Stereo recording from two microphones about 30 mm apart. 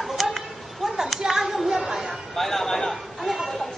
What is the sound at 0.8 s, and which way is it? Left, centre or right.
Hands, centre.